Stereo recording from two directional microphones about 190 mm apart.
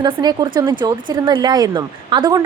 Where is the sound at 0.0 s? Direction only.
20° right (ahead or behind).